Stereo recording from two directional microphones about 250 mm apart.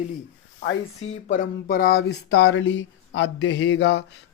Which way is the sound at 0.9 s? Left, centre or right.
Left.